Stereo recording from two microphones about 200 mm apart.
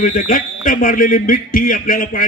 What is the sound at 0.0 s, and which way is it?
A man's voice, 45° left (ahead or behind).